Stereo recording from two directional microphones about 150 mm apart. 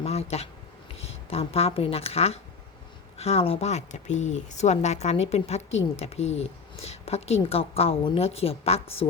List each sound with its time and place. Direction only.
0.0 s speech: 45° left (ahead or behind)